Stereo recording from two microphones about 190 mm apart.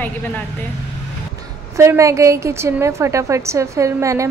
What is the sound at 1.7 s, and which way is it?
A woman's voice, 15° right (ahead or behind).